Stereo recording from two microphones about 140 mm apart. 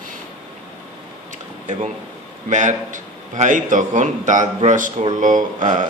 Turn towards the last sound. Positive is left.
turn(degrees=-65)  # may be behind; listen again after turning